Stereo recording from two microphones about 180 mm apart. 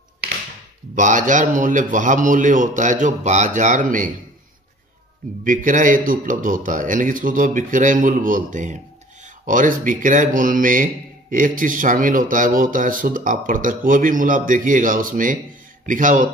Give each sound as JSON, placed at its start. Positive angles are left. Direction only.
{"t": 0.9, "sound": "speech", "side_deg": -45}
{"t": 5.4, "sound": "speech", "side_deg": -45}